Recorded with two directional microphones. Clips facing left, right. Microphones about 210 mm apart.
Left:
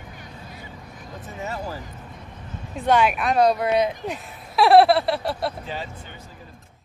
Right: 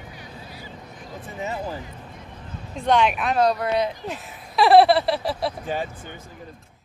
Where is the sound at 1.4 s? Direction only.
15° right (ahead or behind).